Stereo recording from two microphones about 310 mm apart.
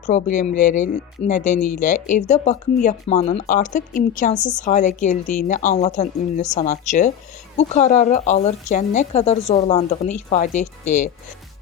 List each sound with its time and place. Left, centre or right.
0.0 s speech: left